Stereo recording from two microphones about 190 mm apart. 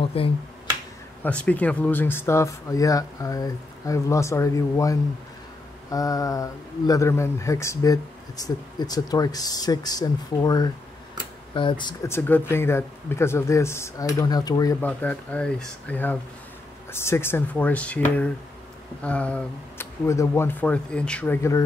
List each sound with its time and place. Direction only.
0.0 s speech: 30° left (ahead or behind)
1.2 s speech: 5° left (ahead or behind); by 11.9 s 25° left (ahead or behind)
12.1 s speech: 10° left (ahead or behind)
14.8 s speech: 10° left (ahead or behind)